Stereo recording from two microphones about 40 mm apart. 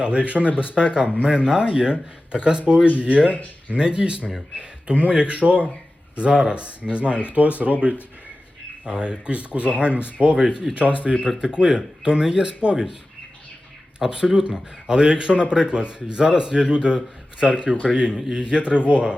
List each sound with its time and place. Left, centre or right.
0.0 s speech: right
7.7 s speech: centre
10.3 s speech: centre
14.0 s speech: centre